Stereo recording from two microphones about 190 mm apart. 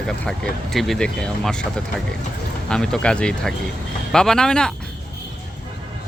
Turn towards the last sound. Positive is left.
turn(degrees=5)  # may be behind; listen again after turning